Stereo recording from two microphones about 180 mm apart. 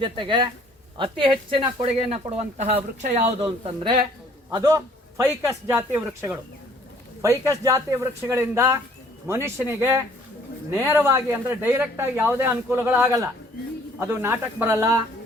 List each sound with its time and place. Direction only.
0.0 s speech: 25° right (ahead or behind)
4.5 s speech: 15° right (ahead or behind)